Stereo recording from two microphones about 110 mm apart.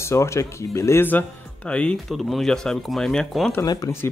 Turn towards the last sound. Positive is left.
turn(degrees=35)  # may be behind; listen again after turning